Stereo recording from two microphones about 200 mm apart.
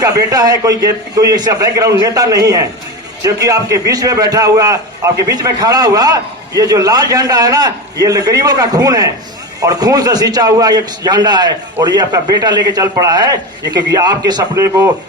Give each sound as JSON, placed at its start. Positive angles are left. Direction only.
{"t": 0.0, "sound": "a man's voice", "side_deg": -15}